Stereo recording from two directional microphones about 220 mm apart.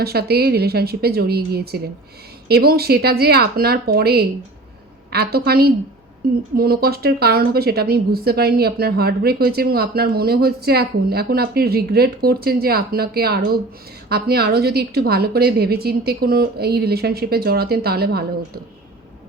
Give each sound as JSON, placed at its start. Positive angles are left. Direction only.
{"t": 0.0, "sound": "speech", "side_deg": -45}